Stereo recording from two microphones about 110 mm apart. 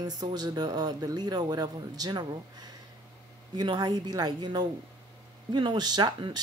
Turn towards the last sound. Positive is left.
turn(degrees=-45)  # may be behind; listen again after turning